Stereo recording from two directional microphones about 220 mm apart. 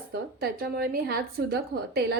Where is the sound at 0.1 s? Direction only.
45° right (ahead or behind).